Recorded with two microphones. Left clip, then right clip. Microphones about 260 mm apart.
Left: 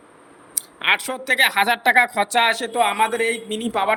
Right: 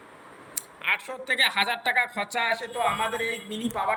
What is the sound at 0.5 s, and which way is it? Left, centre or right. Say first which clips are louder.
Speech: left 7 dB; left.